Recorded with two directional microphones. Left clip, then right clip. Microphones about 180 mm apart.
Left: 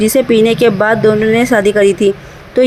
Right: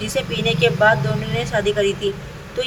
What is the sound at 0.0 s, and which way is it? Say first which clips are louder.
Speech: left 12 dB; 55° left (ahead or behind).